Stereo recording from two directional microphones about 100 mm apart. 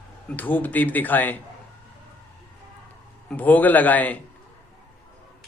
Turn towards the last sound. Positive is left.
turn(degrees=15)  # may be behind; listen again after turning